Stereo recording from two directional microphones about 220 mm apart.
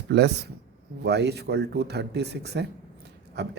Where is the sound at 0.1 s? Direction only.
50° right (ahead or behind).